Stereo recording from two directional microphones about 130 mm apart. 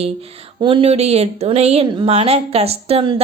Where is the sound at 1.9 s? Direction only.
35° right (ahead or behind).